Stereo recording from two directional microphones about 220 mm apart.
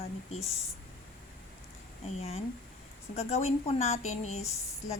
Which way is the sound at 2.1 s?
30° left (ahead or behind).